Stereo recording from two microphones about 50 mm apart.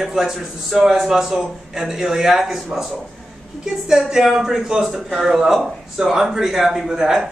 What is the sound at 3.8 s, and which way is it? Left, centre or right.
A man's voice, centre.